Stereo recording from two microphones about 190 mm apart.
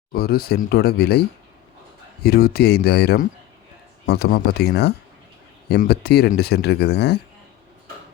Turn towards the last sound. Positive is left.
turn(degrees=60)  # may be behind; listen again after turning